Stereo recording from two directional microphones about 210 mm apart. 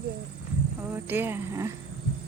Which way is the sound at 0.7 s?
10° right (ahead or behind).